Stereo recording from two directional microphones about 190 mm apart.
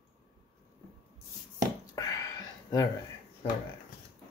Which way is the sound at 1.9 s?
20° left (ahead or behind).